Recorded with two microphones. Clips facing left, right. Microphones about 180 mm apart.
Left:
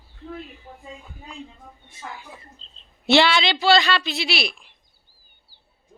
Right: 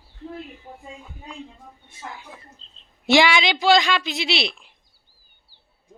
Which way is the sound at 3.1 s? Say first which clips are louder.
Even; 15° right (ahead or behind).